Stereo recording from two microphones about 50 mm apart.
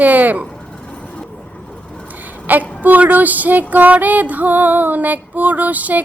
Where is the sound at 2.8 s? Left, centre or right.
Right.